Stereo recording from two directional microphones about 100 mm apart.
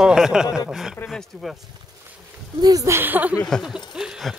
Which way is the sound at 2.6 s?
35° right (ahead or behind).